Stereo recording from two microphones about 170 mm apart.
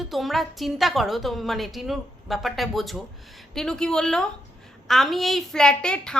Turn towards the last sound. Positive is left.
turn(degrees=5)  # may be behind; listen again after turning